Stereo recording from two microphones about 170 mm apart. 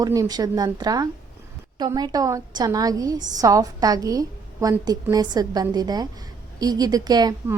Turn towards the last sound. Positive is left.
turn(degrees=-25)  # may be behind; listen again after turning